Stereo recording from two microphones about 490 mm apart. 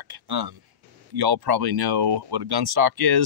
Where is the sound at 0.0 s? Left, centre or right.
Right.